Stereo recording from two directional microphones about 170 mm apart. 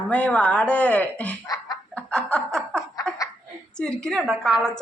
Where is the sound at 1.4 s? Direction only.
20° left (ahead or behind).